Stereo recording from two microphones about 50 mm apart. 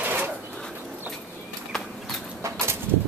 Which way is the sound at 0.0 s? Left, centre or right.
Right.